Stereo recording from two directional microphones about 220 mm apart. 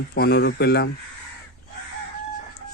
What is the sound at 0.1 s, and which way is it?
Speech, 45° left (ahead or behind).